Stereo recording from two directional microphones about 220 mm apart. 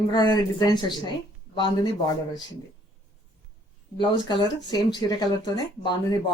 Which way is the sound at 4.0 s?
20° left (ahead or behind).